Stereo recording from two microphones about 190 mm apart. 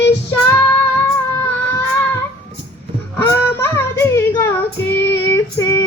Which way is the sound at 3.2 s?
10° left (ahead or behind).